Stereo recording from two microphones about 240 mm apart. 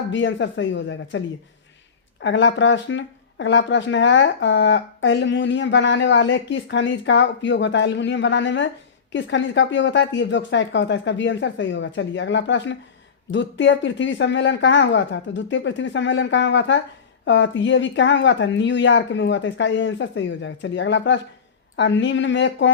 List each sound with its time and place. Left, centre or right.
0.1 s speech: left
2.2 s speech: left